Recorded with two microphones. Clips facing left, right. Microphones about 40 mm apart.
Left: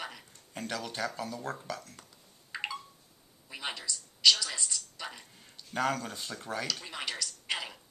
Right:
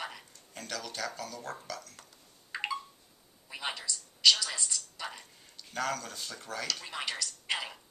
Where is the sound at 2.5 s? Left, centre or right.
Centre.